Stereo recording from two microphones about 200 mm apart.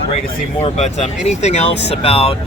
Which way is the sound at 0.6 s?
35° left (ahead or behind).